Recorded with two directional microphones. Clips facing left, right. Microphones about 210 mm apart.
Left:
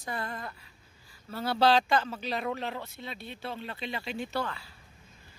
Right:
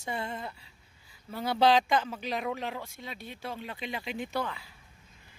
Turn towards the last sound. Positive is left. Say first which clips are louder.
# even
turn(degrees=-15)  # may be behind; listen again after turning